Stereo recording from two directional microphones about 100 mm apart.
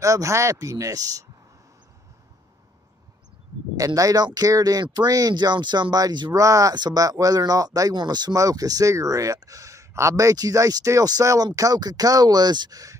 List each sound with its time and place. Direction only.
0.0 s speech: 30° right (ahead or behind)
3.7 s speech: 35° right (ahead or behind)